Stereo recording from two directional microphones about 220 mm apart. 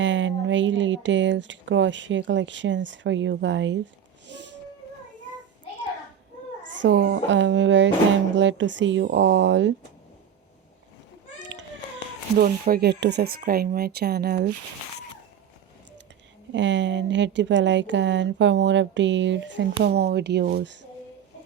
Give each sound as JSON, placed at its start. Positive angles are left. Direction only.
{"t": 0.0, "sound": "speech", "side_deg": -55}
{"t": 4.3, "sound": "music", "side_deg": -55}
{"t": 6.7, "sound": "a woman's voice", "side_deg": -55}
{"t": 12.4, "sound": "speech", "side_deg": -40}
{"t": 16.5, "sound": "a woman's voice", "side_deg": -55}